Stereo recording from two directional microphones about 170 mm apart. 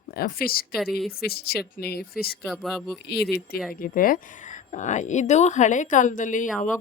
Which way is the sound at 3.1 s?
70° left (ahead or behind).